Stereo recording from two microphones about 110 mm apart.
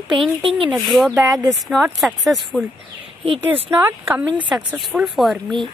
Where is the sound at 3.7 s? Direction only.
20° right (ahead or behind).